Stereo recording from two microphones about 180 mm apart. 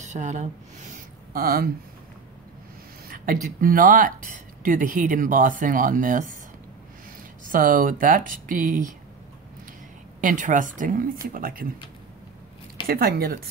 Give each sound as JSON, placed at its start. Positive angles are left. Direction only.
{"t": 0.0, "sound": "a woman's voice", "side_deg": -40}
{"t": 1.3, "sound": "a woman's voice", "side_deg": -55}
{"t": 3.6, "sound": "speech", "side_deg": -50}
{"t": 7.5, "sound": "speech", "side_deg": -50}
{"t": 10.2, "sound": "speech", "side_deg": -45}
{"t": 12.8, "sound": "a woman's voice", "side_deg": -55}